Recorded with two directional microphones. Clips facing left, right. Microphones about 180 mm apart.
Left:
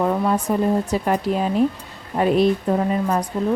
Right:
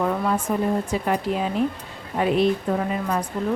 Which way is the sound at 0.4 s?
40° left (ahead or behind).